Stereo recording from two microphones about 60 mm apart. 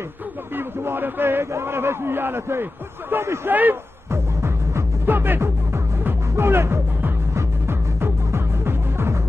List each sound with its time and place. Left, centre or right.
0.6 s a man's voice: right
4.1 s music: right
5.0 s music: right